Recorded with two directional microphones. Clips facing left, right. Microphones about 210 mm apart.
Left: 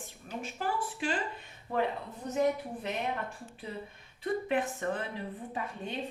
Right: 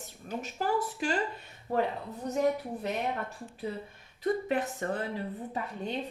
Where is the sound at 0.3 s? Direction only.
40° right (ahead or behind).